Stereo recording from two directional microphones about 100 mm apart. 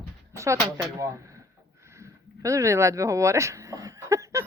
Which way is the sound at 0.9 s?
30° right (ahead or behind).